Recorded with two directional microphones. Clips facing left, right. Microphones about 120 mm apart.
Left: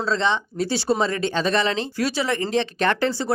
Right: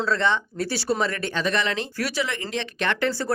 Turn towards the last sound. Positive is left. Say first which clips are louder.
# left 4 dB
turn(degrees=35)  # may be behind; listen again after turning